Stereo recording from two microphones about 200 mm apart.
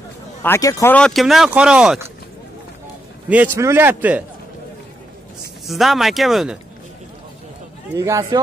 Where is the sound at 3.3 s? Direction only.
10° right (ahead or behind).